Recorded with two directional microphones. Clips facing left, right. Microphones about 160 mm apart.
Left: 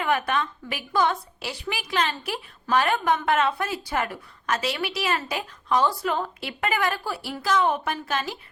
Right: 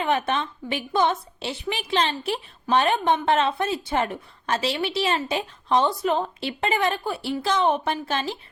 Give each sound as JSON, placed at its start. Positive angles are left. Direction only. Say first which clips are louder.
{"t": 0.0, "sound": "a woman's voice", "louder": "right 1 dB", "side_deg": -25}